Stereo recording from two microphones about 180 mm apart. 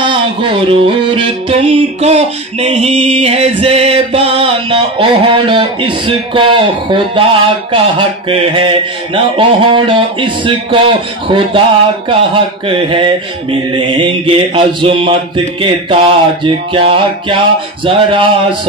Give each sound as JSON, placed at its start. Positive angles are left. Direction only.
{"t": 0.0, "sound": "music", "side_deg": -25}
{"t": 12.6, "sound": "music", "side_deg": -30}